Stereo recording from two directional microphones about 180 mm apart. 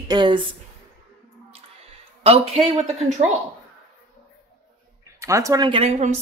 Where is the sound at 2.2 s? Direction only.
35° right (ahead or behind).